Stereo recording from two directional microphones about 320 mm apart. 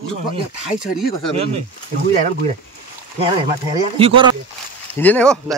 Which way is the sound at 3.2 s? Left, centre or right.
Centre.